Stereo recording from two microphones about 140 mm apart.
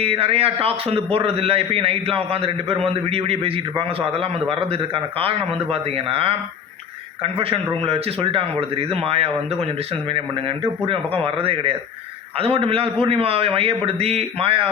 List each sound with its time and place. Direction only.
0.0 s a man's voice: 45° right (ahead or behind)